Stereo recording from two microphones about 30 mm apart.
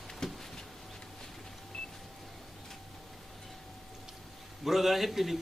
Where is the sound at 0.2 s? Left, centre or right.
Centre.